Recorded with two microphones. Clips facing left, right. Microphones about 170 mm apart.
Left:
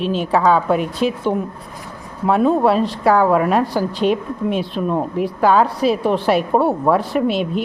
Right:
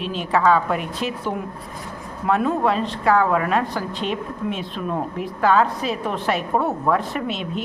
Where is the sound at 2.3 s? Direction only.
30° left (ahead or behind).